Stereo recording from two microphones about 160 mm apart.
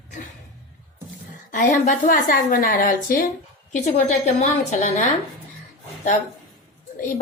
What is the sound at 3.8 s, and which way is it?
A woman's voice, 50° left (ahead or behind).